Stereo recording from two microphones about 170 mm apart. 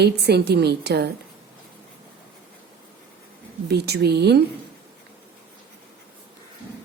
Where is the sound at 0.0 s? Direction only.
75° right (ahead or behind).